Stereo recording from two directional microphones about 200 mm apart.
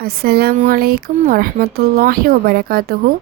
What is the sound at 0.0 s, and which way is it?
Speech, 50° right (ahead or behind).